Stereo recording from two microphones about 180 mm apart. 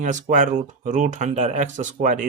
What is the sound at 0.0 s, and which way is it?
Speech, 45° right (ahead or behind).